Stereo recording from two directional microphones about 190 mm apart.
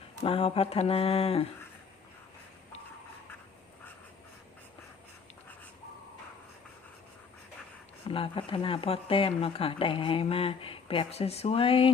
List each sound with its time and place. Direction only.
0.2 s speech: 30° left (ahead or behind)
8.0 s speech: 30° left (ahead or behind)